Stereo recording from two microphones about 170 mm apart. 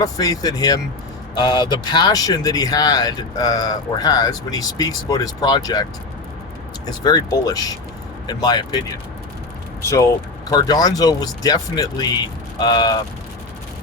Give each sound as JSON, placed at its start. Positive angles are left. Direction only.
{"t": 0.0, "sound": "speech", "side_deg": 20}
{"t": 6.8, "sound": "speech", "side_deg": 25}
{"t": 9.8, "sound": "speech", "side_deg": 15}